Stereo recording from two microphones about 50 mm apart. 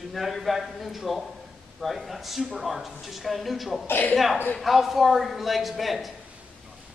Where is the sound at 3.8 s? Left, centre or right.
Left.